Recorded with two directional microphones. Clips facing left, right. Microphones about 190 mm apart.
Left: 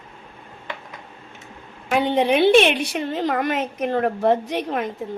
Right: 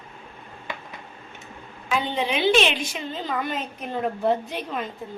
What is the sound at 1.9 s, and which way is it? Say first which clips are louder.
A woman's voice: left 7 dB; 60° left (ahead or behind).